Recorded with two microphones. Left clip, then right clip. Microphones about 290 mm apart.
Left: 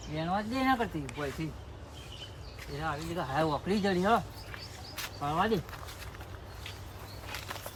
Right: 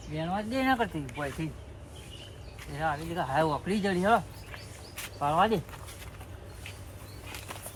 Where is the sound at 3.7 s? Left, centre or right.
Centre.